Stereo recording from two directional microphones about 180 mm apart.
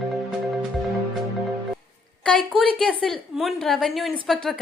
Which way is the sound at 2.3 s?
Centre (ahead or behind).